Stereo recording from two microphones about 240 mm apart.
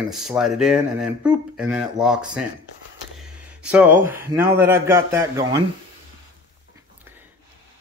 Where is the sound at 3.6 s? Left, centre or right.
Centre.